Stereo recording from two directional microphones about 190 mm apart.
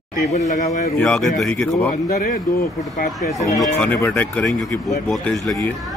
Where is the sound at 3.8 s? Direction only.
5° left (ahead or behind).